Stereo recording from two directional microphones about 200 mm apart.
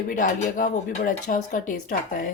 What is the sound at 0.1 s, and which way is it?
Speech, 40° left (ahead or behind).